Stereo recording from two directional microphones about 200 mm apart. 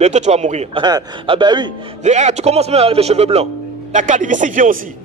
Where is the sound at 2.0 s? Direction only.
35° right (ahead or behind).